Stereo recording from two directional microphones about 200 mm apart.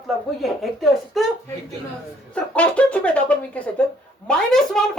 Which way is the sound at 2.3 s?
5° left (ahead or behind).